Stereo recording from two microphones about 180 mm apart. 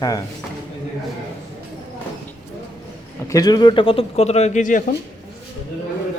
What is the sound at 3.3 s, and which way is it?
Speech, 20° left (ahead or behind).